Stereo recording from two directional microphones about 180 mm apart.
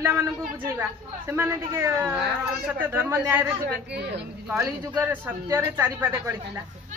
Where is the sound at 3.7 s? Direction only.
65° right (ahead or behind).